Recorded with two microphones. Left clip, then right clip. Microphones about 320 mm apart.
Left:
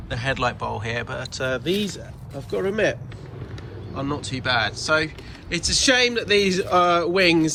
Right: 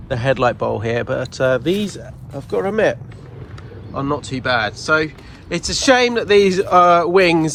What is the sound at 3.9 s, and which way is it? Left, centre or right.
Speech, centre.